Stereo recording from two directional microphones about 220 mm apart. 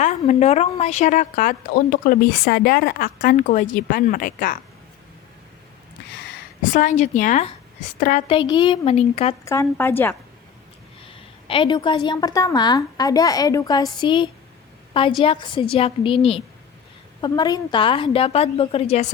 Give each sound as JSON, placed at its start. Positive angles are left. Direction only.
{"t": 0.0, "sound": "a woman's voice", "side_deg": 30}
{"t": 6.6, "sound": "a woman's voice", "side_deg": 35}
{"t": 8.3, "sound": "a woman's voice", "side_deg": 20}
{"t": 9.4, "sound": "a woman's voice", "side_deg": 15}
{"t": 11.0, "sound": "a woman's voice", "side_deg": 25}